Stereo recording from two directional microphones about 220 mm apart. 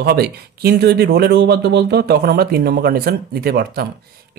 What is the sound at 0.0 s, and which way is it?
A man's voice, 45° right (ahead or behind).